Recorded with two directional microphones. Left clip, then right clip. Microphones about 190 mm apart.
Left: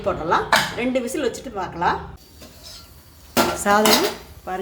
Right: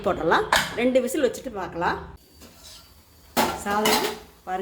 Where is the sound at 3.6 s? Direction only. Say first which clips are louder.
Left 7 dB; 25° left (ahead or behind).